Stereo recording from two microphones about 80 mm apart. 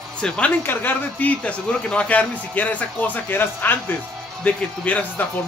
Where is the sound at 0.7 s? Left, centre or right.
Left.